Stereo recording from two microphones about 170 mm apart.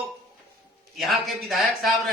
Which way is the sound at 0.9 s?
Centre (ahead or behind).